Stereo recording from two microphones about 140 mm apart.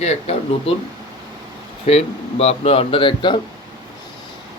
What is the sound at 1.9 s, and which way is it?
Speech, 45° left (ahead or behind).